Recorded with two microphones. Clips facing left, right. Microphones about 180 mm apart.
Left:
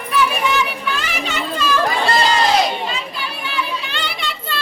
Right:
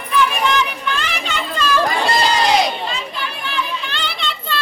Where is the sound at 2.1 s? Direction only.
Centre (ahead or behind).